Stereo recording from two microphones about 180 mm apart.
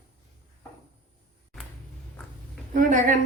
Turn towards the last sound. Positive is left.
turn(degrees=-45)  # may be behind; listen again after turning